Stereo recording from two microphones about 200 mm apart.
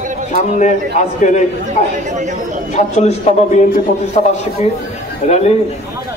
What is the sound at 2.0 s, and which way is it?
Speech, 35° right (ahead or behind).